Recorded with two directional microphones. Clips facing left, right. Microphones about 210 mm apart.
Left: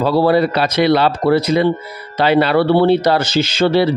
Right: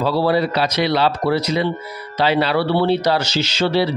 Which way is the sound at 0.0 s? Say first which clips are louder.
Left 4 dB; 50° left (ahead or behind).